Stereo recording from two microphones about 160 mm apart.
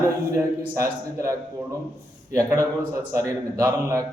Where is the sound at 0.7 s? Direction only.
20° right (ahead or behind).